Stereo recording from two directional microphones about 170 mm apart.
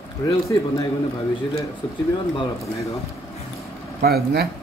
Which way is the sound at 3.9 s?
65° right (ahead or behind).